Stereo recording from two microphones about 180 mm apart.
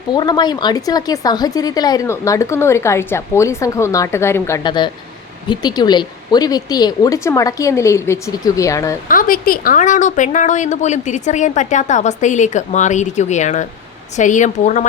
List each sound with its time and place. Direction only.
0.1 s speech: 25° left (ahead or behind)
9.0 s a woman's voice: 50° left (ahead or behind)